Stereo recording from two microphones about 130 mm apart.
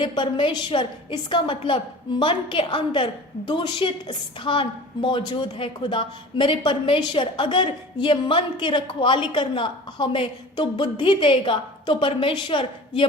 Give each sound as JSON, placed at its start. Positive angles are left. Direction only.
{"t": 0.0, "sound": "a woman's voice", "side_deg": 35}